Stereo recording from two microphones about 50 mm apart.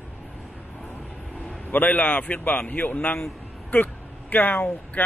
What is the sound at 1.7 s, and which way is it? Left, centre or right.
A man's voice, left.